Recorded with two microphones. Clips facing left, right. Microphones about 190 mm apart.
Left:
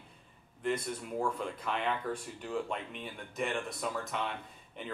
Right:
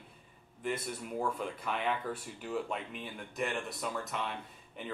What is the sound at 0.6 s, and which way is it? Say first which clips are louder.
Speech: left 3 dB; 5° right (ahead or behind).